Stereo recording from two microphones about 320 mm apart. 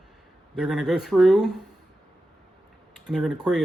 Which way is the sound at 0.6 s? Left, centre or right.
Centre.